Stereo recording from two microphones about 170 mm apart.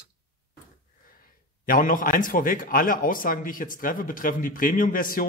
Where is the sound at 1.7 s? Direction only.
50° left (ahead or behind).